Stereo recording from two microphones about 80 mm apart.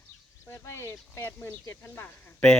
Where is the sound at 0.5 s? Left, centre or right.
Left.